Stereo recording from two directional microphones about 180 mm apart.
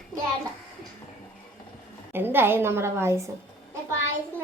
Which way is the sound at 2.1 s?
10° right (ahead or behind).